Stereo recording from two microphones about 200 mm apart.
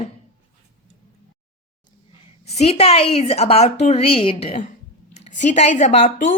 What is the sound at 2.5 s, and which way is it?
Speech, 30° left (ahead or behind).